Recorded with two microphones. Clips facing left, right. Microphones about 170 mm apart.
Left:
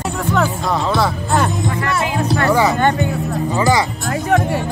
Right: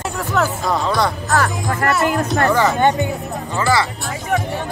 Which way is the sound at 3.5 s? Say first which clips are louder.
Left 2 dB; 15° left (ahead or behind).